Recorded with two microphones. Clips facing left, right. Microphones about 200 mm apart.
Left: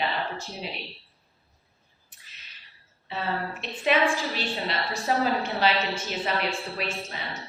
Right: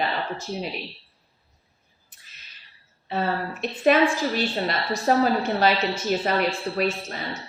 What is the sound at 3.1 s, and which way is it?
A woman's voice, 45° right (ahead or behind).